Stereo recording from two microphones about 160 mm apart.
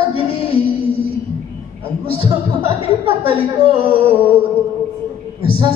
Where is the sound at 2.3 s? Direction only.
35° right (ahead or behind).